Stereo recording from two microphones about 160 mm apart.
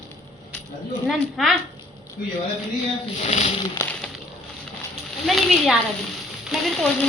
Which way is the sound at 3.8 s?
15° left (ahead or behind).